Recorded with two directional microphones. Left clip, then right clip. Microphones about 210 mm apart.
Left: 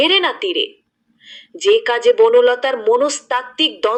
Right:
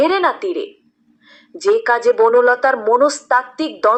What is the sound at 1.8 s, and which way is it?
A woman's voice, 55° left (ahead or behind).